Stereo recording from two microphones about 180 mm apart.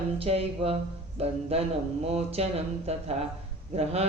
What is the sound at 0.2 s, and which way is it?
Speech, 35° right (ahead or behind).